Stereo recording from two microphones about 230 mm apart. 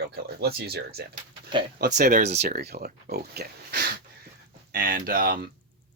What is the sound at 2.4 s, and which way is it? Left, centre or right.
Speech, right.